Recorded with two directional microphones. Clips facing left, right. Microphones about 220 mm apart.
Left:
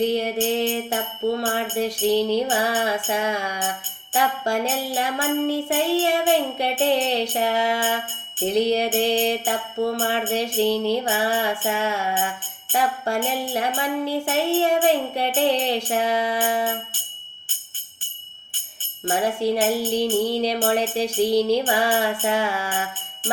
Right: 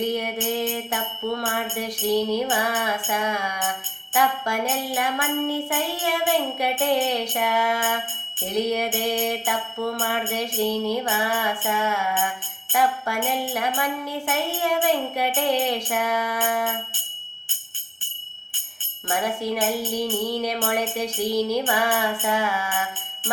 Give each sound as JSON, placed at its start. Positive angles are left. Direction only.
{"t": 0.0, "sound": "music", "side_deg": 30}
{"t": 19.0, "sound": "music", "side_deg": 30}